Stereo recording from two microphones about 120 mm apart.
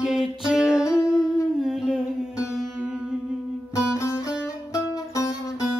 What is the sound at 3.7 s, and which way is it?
Music, 25° left (ahead or behind).